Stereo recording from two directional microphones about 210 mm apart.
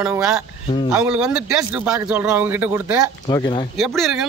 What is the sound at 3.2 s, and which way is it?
Speech, 20° left (ahead or behind).